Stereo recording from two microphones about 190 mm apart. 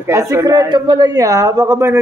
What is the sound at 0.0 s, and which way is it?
Speech, 15° right (ahead or behind).